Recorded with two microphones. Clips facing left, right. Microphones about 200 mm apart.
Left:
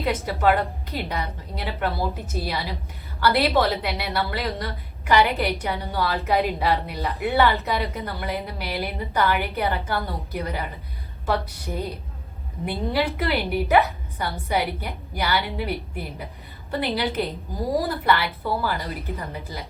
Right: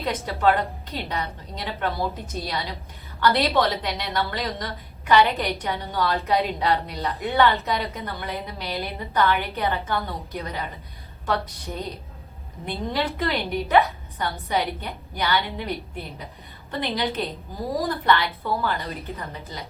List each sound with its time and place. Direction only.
0.0 s a woman's voice: 10° left (ahead or behind)